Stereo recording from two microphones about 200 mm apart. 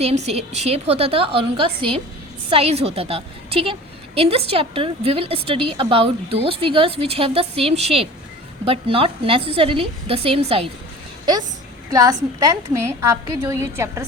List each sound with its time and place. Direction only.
0.0 s a woman's voice: 30° right (ahead or behind)
11.9 s a woman's voice: 15° right (ahead or behind)